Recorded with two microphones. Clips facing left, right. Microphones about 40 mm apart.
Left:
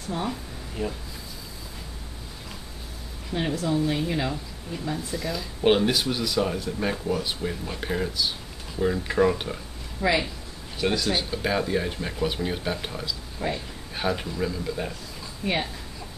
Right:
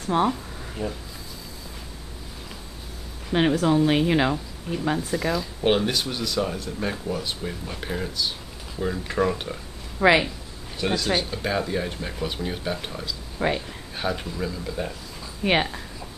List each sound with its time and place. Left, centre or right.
0.1 s speech: right
0.8 s speech: centre
3.3 s speech: right
5.1 s speech: right
5.6 s speech: centre
9.9 s speech: right
10.8 s speech: centre
13.4 s speech: right
13.9 s speech: centre
15.4 s speech: right